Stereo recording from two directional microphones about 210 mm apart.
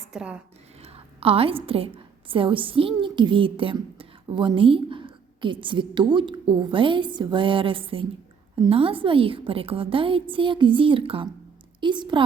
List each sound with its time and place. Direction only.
0.0 s speech: 5° right (ahead or behind)
0.8 s a woman's voice: 30° right (ahead or behind)